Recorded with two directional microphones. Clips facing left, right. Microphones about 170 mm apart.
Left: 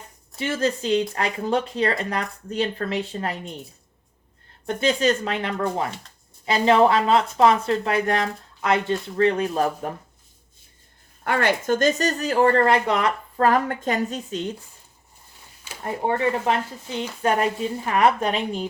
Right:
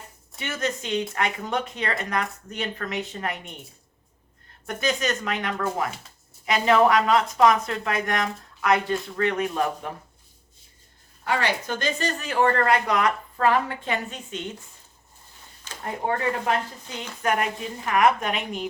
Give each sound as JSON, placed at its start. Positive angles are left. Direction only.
{"t": 0.3, "sound": "speech", "side_deg": 30}
{"t": 4.6, "sound": "speech", "side_deg": 30}
{"t": 11.2, "sound": "speech", "side_deg": 55}
{"t": 13.5, "sound": "speech", "side_deg": 40}
{"t": 15.7, "sound": "a sound", "side_deg": 10}
{"t": 16.0, "sound": "speech", "side_deg": 25}
{"t": 17.2, "sound": "speech", "side_deg": 30}